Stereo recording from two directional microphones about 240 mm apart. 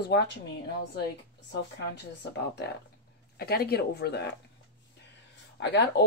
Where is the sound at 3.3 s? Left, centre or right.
Left.